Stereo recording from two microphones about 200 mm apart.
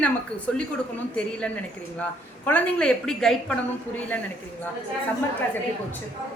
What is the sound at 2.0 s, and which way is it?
Speech, 5° left (ahead or behind).